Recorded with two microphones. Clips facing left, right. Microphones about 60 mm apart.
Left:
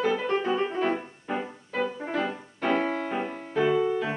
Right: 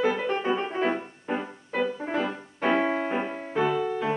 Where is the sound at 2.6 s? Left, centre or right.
Right.